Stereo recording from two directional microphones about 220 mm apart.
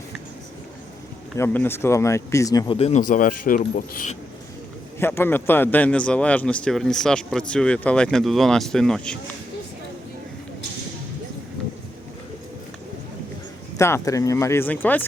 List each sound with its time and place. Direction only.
1.4 s speech: 10° left (ahead or behind); by 3.0 s 25° left (ahead or behind)
3.0 s speech: 40° left (ahead or behind)
4.9 s a man's voice: 10° left (ahead or behind)
13.7 s speech: 10° left (ahead or behind)